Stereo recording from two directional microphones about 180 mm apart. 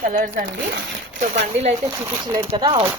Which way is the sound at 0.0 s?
50° right (ahead or behind).